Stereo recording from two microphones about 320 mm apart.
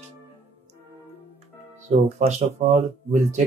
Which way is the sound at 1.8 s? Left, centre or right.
Right.